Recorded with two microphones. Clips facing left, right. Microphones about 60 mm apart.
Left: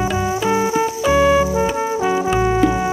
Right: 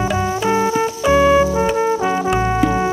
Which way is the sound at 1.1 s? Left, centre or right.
Centre.